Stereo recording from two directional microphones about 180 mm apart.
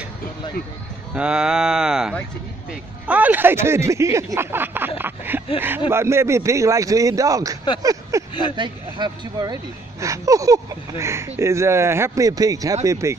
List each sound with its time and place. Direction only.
1.1 s speech: 5° right (ahead or behind)
7.8 s a sound: 20° right (ahead or behind)
8.5 s speech: 25° right (ahead or behind)